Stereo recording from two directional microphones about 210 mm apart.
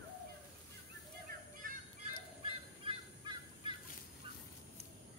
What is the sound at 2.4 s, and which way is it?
Fowl, 25° right (ahead or behind).